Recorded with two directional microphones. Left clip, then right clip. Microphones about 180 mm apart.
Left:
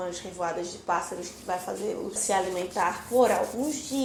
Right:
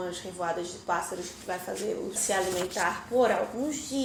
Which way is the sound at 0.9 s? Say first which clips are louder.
Left 2 dB; 10° left (ahead or behind).